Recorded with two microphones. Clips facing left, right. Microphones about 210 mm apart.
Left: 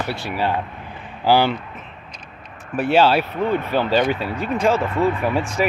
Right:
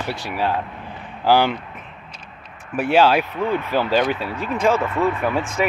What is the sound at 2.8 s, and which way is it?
Speech, 10° right (ahead or behind).